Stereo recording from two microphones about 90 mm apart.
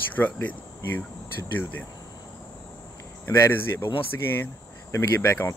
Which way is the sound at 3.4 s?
25° left (ahead or behind).